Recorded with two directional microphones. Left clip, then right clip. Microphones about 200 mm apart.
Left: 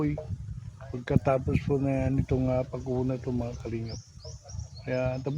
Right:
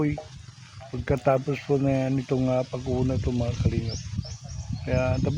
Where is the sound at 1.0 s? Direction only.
45° right (ahead or behind).